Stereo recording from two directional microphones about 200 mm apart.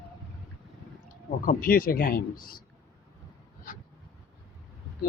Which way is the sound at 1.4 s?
45° left (ahead or behind).